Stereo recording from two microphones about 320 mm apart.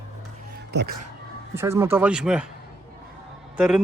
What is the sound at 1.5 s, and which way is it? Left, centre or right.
Speech, centre.